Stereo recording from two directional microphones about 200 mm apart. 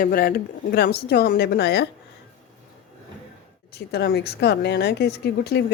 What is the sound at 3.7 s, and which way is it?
A woman's voice, 55° left (ahead or behind).